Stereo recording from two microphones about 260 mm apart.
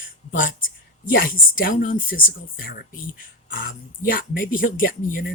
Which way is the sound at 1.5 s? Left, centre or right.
Left.